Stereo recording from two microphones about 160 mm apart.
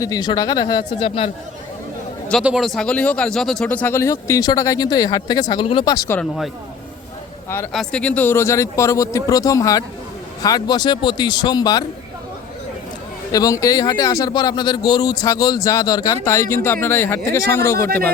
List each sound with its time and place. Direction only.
0.0 s a man's voice: 25° left (ahead or behind)
2.4 s speech: 5° right (ahead or behind); by 6.0 s 30° left (ahead or behind)
7.7 s a man's voice: 5° left (ahead or behind); by 11.9 s 25° left (ahead or behind)
13.3 s a man's voice: 20° left (ahead or behind)